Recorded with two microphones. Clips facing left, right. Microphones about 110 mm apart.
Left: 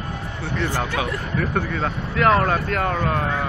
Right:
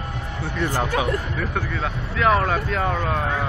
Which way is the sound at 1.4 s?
Centre (ahead or behind).